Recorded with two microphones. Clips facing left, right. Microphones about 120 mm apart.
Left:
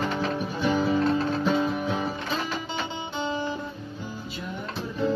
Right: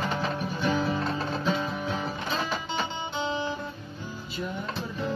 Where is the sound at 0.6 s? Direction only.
Centre (ahead or behind).